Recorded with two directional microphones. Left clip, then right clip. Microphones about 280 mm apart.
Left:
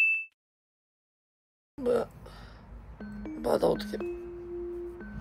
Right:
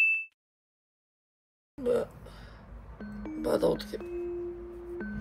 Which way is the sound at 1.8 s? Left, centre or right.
Centre.